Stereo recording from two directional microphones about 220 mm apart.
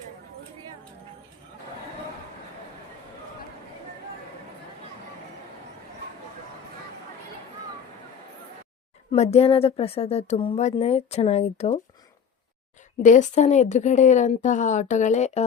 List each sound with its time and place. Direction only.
9.1 s a woman's voice: 30° left (ahead or behind)
13.0 s speech: 35° left (ahead or behind)